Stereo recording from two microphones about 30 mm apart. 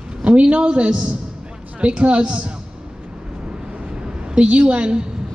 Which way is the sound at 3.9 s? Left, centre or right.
Right.